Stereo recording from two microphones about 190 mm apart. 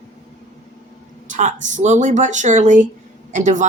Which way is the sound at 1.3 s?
40° right (ahead or behind).